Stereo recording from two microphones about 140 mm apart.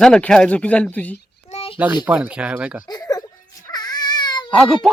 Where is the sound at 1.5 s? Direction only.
45° left (ahead or behind).